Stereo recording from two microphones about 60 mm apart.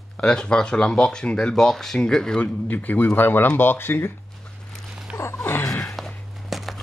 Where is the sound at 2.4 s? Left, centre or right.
Left.